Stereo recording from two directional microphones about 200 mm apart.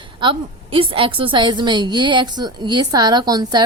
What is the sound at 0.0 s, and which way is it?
A woman's voice, 25° right (ahead or behind).